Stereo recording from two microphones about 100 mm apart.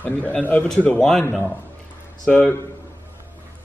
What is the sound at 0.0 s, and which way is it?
Speech, 15° left (ahead or behind).